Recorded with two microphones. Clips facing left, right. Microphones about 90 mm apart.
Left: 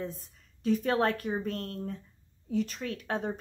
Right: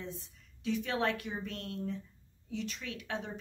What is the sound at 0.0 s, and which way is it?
A woman's voice, 40° left (ahead or behind).